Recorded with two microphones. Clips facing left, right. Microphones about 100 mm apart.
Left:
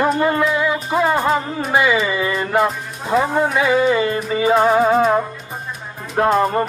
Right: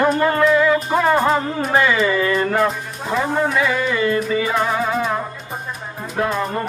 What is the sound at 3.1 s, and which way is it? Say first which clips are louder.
Music: left 2 dB; 30° left (ahead or behind).